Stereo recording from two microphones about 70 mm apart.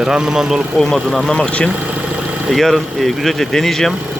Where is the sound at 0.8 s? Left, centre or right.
Centre.